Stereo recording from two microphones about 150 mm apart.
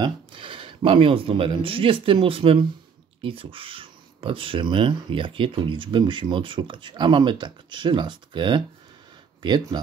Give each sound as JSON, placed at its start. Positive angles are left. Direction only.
{"t": 0.0, "sound": "speech", "side_deg": -35}